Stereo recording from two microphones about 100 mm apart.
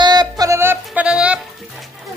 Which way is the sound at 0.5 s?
20° right (ahead or behind).